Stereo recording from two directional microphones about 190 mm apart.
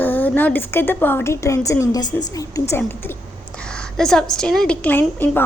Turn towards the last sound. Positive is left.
turn(degrees=10)  # may be behind; listen again after turning